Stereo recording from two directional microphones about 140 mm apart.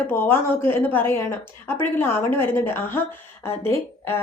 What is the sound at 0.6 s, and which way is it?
A woman's voice, 15° left (ahead or behind).